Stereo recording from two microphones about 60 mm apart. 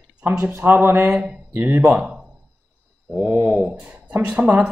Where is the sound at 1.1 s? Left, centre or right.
Centre.